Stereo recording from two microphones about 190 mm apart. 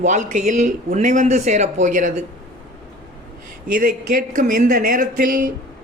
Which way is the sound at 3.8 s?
45° right (ahead or behind).